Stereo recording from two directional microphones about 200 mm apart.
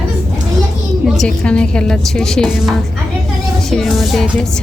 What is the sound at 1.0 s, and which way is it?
A woman's voice, centre (ahead or behind).